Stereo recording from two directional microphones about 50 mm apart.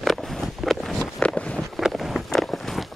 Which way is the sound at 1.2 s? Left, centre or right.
Left.